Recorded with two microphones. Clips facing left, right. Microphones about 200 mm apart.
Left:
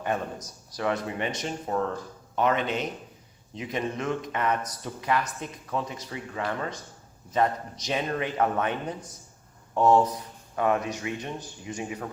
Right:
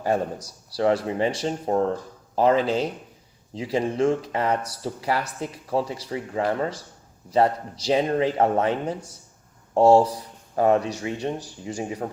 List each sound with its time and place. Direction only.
0.8 s a man's voice: 30° right (ahead or behind)